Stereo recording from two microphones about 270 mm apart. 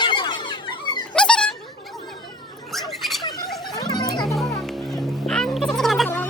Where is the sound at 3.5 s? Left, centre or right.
Centre.